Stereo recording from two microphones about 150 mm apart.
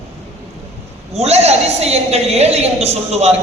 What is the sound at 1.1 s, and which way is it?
A woman's voice, 45° right (ahead or behind).